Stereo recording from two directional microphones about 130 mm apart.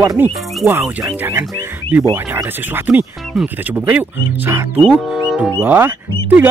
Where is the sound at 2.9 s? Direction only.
Centre (ahead or behind).